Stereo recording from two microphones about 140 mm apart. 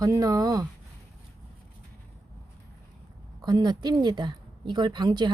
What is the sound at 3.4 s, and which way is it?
A woman's voice, 30° right (ahead or behind).